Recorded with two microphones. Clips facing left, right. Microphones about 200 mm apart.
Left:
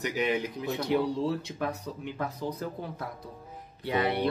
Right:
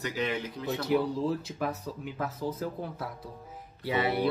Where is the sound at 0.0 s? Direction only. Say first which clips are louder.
Left 3 dB; 15° left (ahead or behind).